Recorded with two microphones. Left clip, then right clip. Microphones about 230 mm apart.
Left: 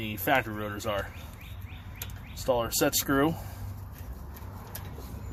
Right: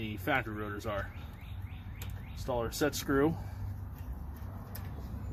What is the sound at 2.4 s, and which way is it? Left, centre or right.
Speech, left.